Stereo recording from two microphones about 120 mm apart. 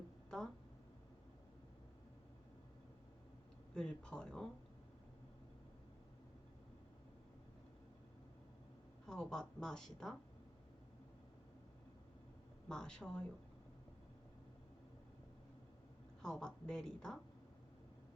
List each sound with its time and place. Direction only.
0.3 s a sound: 5° left (ahead or behind)
3.8 s speech: 5° left (ahead or behind)
9.0 s speech: 5° left (ahead or behind)
12.6 s speech: 5° left (ahead or behind)
16.2 s speech: 5° left (ahead or behind)